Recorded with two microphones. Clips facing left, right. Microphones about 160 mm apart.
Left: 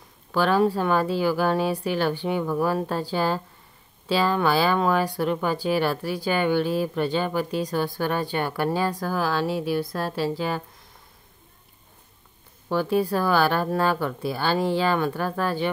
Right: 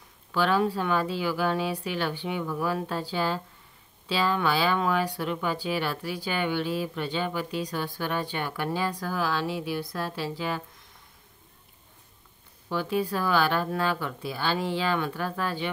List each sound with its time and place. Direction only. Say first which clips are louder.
0.3 s speech: left 4 dB; 45° left (ahead or behind)
12.6 s speech: left 5 dB; 45° left (ahead or behind)